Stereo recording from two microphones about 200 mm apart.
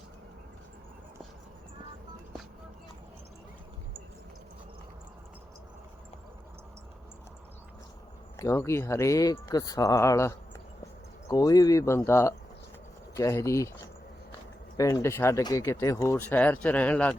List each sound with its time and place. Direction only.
8.4 s speech: 15° left (ahead or behind)
14.8 s speech: 15° left (ahead or behind)